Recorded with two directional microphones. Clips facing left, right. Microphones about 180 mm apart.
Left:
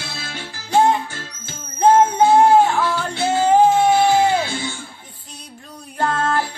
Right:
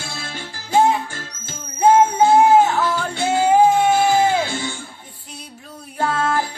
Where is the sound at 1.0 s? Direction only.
45° right (ahead or behind).